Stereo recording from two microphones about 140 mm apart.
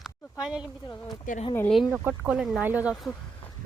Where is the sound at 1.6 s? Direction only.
Centre (ahead or behind).